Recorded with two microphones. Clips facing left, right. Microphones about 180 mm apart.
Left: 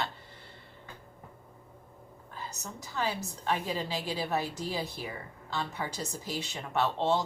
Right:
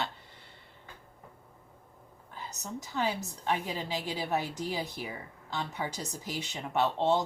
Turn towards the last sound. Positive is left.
turn(degrees=-15)  # may be behind; listen again after turning